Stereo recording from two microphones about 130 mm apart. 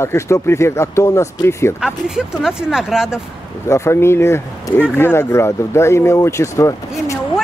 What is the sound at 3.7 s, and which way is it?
Speech, 20° left (ahead or behind).